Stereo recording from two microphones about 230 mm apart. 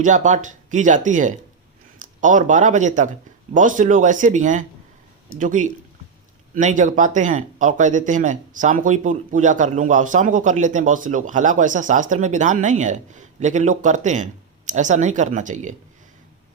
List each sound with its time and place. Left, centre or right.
0.0 s speech: right